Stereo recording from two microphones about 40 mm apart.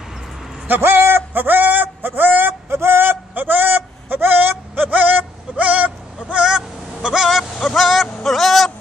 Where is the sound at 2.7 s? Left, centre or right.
Right.